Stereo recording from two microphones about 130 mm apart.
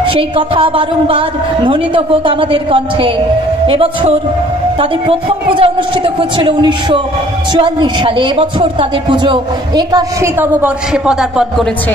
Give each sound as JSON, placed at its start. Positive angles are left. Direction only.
{"t": 0.0, "sound": "a woman's voice", "side_deg": -40}
{"t": 10.4, "sound": "a man's voice", "side_deg": -10}